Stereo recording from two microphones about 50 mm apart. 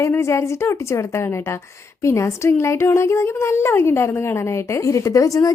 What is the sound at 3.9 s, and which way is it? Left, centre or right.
Speech, left.